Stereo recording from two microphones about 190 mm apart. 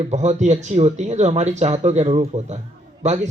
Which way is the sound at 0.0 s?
35° right (ahead or behind).